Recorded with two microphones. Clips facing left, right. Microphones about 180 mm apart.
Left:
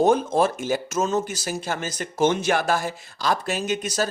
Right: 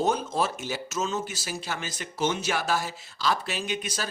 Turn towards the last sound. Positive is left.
turn(degrees=45)  # may be behind; listen again after turning